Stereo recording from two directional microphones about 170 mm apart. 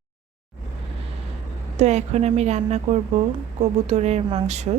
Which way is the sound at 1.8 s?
40° right (ahead or behind).